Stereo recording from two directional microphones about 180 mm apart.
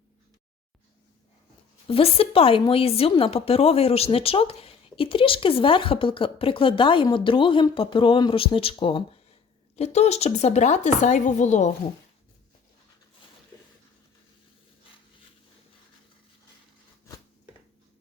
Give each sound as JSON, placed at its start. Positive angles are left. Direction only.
{"t": 1.9, "sound": "speech", "side_deg": 30}